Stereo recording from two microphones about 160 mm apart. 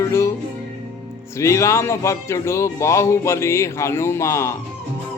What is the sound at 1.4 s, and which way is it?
Speech, 20° left (ahead or behind).